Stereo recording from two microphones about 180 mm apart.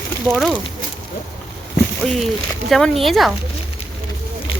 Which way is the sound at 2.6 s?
Centre (ahead or behind).